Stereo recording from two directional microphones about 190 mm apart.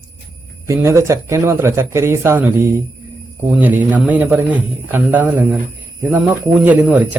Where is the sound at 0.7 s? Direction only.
15° right (ahead or behind).